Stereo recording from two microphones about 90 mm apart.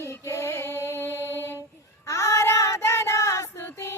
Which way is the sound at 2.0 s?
35° left (ahead or behind).